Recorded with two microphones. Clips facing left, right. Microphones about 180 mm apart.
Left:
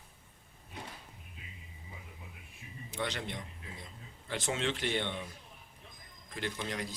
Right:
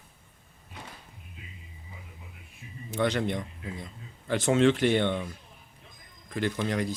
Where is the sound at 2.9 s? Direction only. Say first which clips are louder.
Right 11 dB; 50° right (ahead or behind).